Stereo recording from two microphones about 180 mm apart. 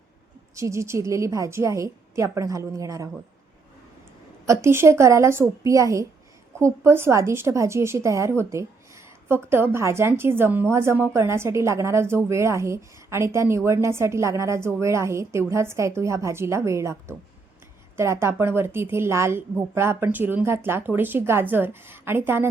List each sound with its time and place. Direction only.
0.5 s a woman's voice: 15° right (ahead or behind)
4.4 s a woman's voice: 15° right (ahead or behind)